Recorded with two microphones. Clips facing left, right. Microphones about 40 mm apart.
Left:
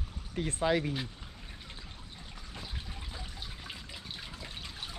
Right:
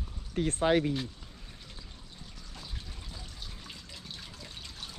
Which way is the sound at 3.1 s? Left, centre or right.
Centre.